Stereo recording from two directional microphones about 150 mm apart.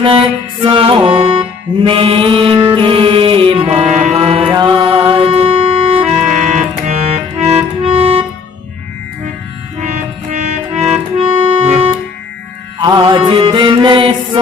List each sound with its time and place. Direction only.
0.0 s music: 35° right (ahead or behind)
4.6 s music: 30° right (ahead or behind)
6.2 s music: 55° right (ahead or behind); by 8.3 s 40° right (ahead or behind)
10.3 s accordion: 50° right (ahead or behind)
12.8 s mantra: 30° right (ahead or behind)